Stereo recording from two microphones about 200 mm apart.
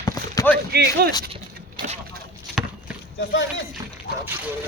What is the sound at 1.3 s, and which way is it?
Vehicle, 30° right (ahead or behind).